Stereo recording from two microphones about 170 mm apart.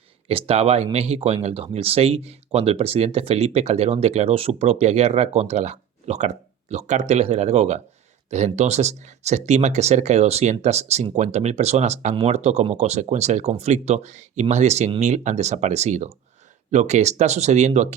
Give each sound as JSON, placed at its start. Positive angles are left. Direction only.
{"t": 0.3, "sound": "speech", "side_deg": -35}